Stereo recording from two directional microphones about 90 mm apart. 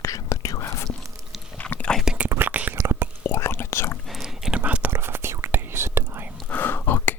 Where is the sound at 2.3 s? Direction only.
20° right (ahead or behind).